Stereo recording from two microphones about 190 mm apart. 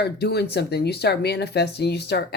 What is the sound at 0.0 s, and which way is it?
Speech, 60° left (ahead or behind).